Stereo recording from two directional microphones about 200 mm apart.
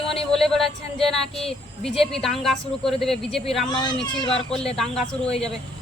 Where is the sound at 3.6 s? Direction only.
20° left (ahead or behind).